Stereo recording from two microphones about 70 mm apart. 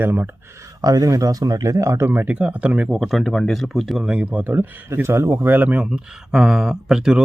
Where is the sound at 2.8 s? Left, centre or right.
Centre; by 4.9 s right.